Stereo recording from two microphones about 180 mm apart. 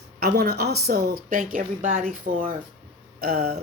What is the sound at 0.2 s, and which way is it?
Speech, 60° right (ahead or behind).